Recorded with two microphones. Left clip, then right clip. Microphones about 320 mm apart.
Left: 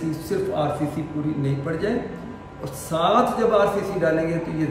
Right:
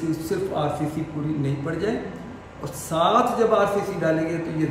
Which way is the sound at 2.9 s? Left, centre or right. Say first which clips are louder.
Even; centre.